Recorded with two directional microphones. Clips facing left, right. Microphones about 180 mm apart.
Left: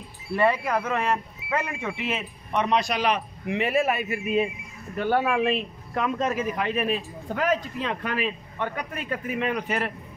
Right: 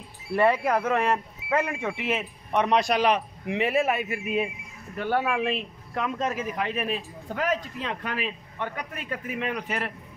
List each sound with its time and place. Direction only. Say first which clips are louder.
0.4 s speech: right 1 dB; 50° right (ahead or behind)
3.4 s a man's voice: left 1 dB; 25° right (ahead or behind)
4.0 s speech: left 3 dB; 15° right (ahead or behind)
4.9 s speech: left 3 dB; 30° left (ahead or behind)
5.2 s speech: left 3 dB; 40° left (ahead or behind)
5.9 s a man's voice: left 3 dB; 60° left (ahead or behind)